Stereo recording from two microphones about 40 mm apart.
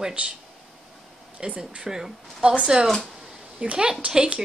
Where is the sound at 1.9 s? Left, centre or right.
Centre.